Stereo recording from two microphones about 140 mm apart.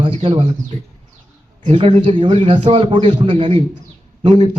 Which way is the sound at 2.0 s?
40° right (ahead or behind).